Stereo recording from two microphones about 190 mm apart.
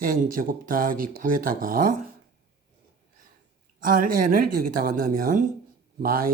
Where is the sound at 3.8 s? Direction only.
45° right (ahead or behind).